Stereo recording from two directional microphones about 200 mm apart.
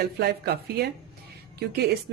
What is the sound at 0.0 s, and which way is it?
Dishes, 55° right (ahead or behind).